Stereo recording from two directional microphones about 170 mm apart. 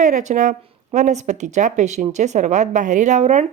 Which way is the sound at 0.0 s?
50° right (ahead or behind).